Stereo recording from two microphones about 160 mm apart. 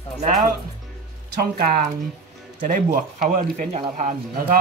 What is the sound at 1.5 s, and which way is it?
Speech, 65° right (ahead or behind).